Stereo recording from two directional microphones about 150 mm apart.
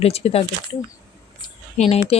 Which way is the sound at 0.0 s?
40° left (ahead or behind).